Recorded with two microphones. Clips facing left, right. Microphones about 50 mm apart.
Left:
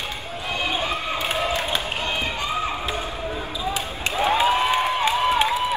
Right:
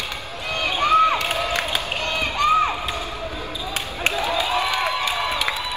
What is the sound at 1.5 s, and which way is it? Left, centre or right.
Run, right.